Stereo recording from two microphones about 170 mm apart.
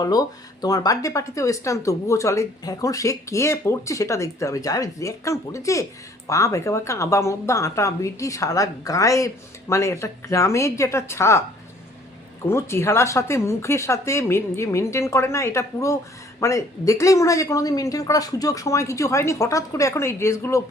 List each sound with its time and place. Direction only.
0.0 s a woman's voice: 20° left (ahead or behind)
12.5 s a woman's voice: 15° left (ahead or behind)